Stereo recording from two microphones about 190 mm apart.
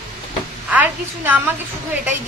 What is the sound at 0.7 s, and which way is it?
Speech, 10° right (ahead or behind).